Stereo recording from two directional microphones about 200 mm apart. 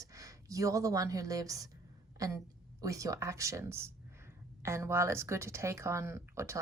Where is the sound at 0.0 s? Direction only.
15° right (ahead or behind).